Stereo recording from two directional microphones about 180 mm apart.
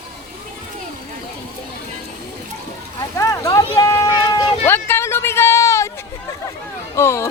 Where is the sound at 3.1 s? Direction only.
15° left (ahead or behind).